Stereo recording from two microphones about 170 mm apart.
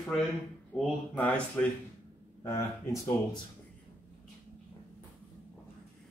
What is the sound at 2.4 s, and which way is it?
Speech, 20° left (ahead or behind).